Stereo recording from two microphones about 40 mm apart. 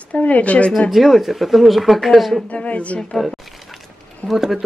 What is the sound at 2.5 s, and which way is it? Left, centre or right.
Speech, left.